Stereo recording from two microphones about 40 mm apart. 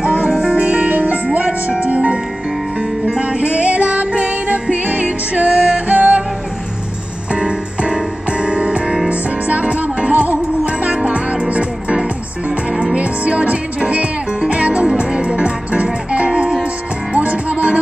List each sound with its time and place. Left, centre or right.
0.0 s music: right
7.3 s music: right
12.9 s music: right